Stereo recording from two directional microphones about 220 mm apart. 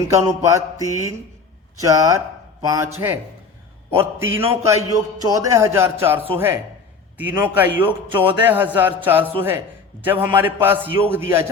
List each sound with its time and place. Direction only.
0.0 s speech: 15° right (ahead or behind)
3.9 s speech: 10° right (ahead or behind)